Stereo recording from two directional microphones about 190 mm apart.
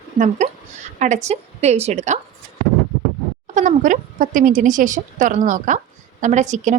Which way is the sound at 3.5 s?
40° right (ahead or behind).